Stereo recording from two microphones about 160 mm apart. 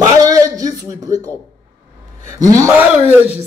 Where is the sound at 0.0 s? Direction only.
20° right (ahead or behind).